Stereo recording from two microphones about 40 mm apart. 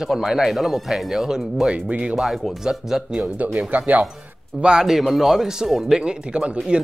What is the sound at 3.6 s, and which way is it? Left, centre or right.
Speech, right.